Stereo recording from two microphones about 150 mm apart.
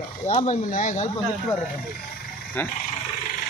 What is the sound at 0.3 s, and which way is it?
Speech, 50° left (ahead or behind).